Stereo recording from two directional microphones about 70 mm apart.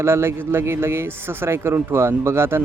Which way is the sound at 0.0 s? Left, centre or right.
Right.